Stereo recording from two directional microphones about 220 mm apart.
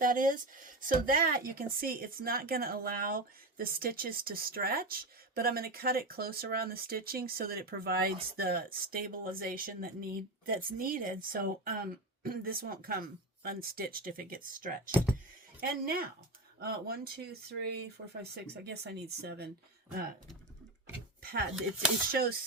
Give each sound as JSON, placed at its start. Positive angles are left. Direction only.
{"t": 0.0, "sound": "a woman's voice", "side_deg": -40}
{"t": 16.6, "sound": "speech", "side_deg": -45}
{"t": 21.5, "sound": "speech", "side_deg": -5}
{"t": 22.1, "sound": "speech", "side_deg": -45}